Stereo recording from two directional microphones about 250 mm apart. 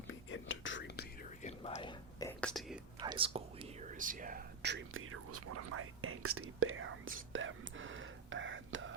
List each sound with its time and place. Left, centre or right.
0.1 s whispering: left
1.4 s whispering: left
2.4 s whispering: centre
3.0 s whispering: centre; by 8.9 s right